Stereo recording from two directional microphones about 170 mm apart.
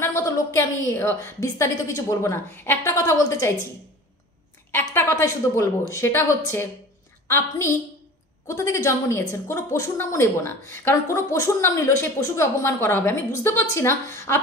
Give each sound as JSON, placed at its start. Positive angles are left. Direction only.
{"t": 0.0, "sound": "a woman's voice", "side_deg": 15}
{"t": 4.6, "sound": "a woman's voice", "side_deg": 15}